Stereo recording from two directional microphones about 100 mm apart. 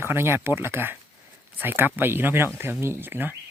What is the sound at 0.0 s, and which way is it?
Speech, 25° right (ahead or behind).